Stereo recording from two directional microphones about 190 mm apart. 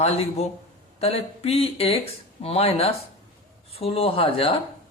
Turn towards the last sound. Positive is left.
turn(degrees=30)  # may be behind; listen again after turning